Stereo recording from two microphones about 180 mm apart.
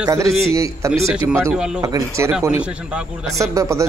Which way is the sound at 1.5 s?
5° right (ahead or behind).